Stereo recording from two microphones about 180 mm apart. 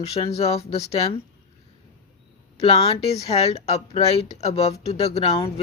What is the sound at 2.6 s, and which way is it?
Speech, 35° left (ahead or behind).